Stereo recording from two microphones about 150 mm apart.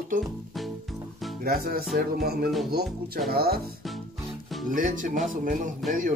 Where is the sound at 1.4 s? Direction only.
80° right.